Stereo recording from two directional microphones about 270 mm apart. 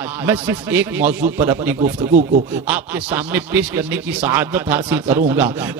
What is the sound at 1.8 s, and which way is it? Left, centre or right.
Speech, right.